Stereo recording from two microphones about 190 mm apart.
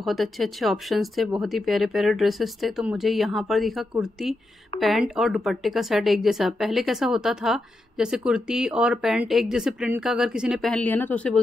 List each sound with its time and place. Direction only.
0.0 s speech: centre (ahead or behind)